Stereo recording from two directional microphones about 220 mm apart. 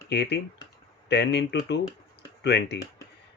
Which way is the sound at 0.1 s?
50° left (ahead or behind).